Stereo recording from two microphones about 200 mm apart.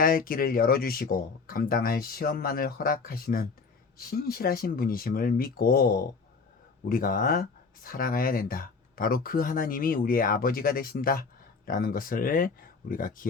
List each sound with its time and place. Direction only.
0.0 s speech: 45° left (ahead or behind)